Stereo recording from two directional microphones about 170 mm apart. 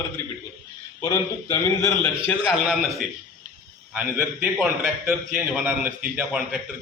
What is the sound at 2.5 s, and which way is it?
Speech, centre (ahead or behind).